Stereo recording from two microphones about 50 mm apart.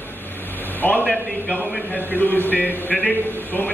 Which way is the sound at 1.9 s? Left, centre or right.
Left.